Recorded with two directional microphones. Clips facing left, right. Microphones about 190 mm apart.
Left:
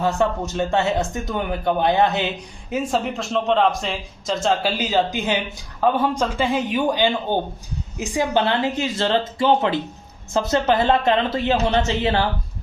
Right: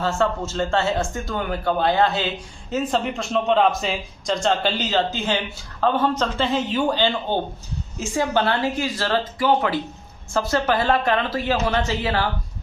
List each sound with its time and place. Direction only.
0.0 s speech: 15° left (ahead or behind)